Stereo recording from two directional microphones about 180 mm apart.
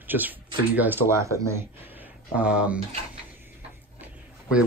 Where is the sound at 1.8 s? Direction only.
10° right (ahead or behind).